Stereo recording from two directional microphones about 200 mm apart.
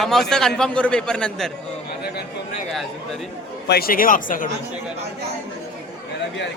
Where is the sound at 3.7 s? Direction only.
50° left (ahead or behind).